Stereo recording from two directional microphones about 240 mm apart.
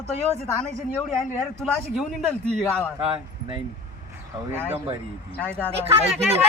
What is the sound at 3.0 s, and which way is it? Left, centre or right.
Speech, right.